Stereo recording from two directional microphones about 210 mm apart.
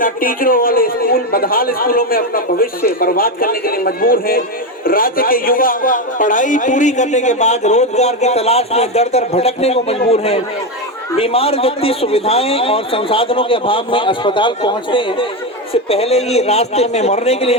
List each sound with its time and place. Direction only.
0.0 s a man's voice: 40° left (ahead or behind)